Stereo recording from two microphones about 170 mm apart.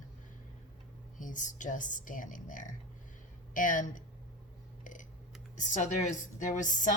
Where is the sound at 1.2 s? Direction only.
50° left (ahead or behind).